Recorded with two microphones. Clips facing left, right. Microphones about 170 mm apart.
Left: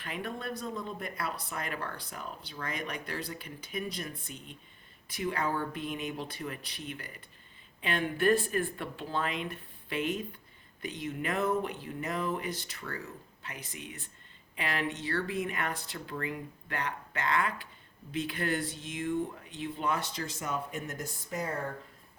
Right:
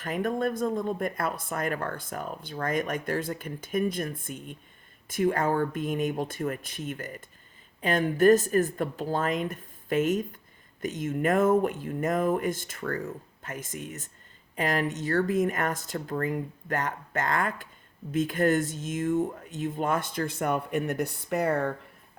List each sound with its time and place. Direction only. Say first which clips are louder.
0.0 s speech: right 10 dB; 45° right (ahead or behind); by 21.7 s 65° right (ahead or behind)